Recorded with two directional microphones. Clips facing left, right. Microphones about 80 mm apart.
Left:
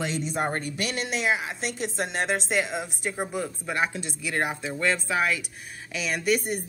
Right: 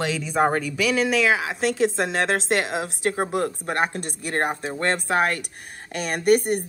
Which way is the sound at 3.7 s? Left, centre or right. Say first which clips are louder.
Right 3 dB; right.